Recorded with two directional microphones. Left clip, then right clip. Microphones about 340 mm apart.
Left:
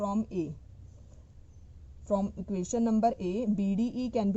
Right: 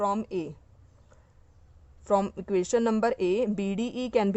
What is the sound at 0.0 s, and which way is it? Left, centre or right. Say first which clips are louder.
Speech: right 5 dB; right.